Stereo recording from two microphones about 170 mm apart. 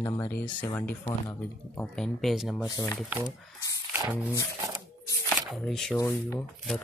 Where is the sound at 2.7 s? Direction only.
15° left (ahead or behind).